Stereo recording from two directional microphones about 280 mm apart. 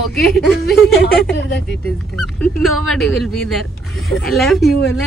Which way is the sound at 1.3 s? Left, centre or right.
Left.